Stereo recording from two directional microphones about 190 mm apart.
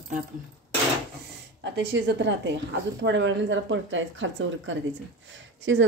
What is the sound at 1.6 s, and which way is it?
A woman's voice, 65° right (ahead or behind).